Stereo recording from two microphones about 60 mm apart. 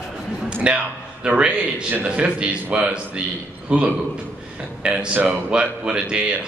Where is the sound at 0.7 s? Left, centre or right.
Centre.